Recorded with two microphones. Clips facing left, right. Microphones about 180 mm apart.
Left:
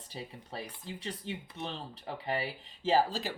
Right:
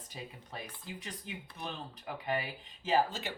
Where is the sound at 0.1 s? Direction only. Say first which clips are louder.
Left 3 dB; 30° left (ahead or behind).